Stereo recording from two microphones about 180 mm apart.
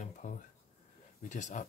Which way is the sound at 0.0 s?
45° left (ahead or behind).